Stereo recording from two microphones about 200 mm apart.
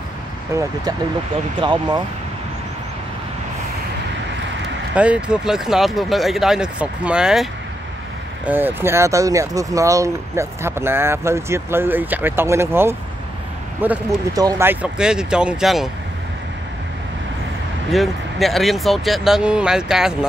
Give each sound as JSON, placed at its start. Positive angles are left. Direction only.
{"t": 0.5, "sound": "speech", "side_deg": -15}
{"t": 4.9, "sound": "speech", "side_deg": -5}
{"t": 8.5, "sound": "speech", "side_deg": -10}
{"t": 17.9, "sound": "speech", "side_deg": 0}